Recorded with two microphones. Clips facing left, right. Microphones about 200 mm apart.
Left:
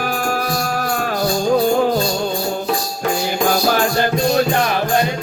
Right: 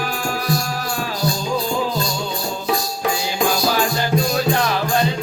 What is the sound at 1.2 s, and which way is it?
Music, 55° left (ahead or behind).